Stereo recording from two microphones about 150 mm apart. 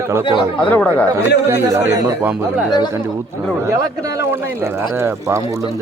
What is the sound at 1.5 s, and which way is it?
Speech, 15° right (ahead or behind).